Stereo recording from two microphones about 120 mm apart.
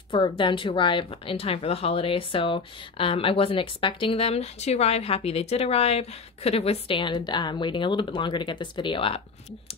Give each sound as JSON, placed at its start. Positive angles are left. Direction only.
{"t": 0.1, "sound": "speech", "side_deg": 40}